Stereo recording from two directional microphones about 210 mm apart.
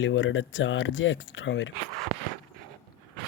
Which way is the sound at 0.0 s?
65° left (ahead or behind).